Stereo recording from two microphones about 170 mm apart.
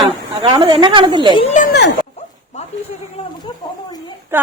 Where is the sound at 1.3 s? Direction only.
35° left (ahead or behind).